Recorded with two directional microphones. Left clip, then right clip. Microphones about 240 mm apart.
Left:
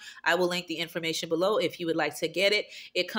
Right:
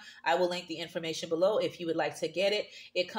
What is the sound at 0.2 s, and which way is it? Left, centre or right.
Speech, left.